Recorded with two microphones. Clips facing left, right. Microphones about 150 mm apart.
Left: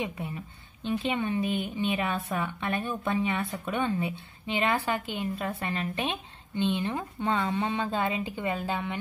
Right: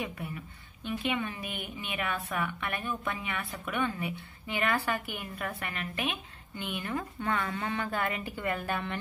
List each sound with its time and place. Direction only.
0.0 s a woman's voice: 20° left (ahead or behind)